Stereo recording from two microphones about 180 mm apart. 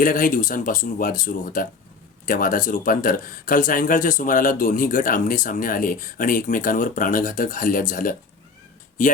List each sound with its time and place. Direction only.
0.0 s speech: 50° left (ahead or behind)